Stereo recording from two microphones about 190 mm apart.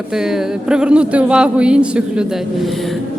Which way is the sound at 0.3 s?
5° right (ahead or behind).